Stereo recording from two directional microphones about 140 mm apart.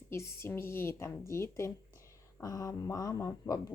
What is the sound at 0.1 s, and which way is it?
Speech, 20° left (ahead or behind).